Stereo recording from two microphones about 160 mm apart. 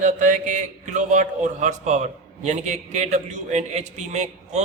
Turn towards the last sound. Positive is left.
turn(degrees=-45)  # may be behind; listen again after turning